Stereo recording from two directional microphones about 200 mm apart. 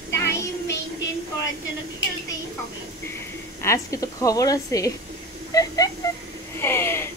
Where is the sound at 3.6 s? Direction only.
15° left (ahead or behind).